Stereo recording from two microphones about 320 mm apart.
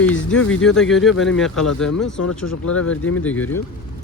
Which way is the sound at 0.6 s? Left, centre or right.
Centre.